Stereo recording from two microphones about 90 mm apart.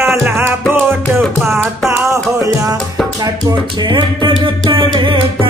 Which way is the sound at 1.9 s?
35° right (ahead or behind).